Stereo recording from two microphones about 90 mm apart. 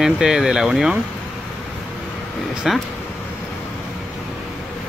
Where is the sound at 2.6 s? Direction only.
5° right (ahead or behind).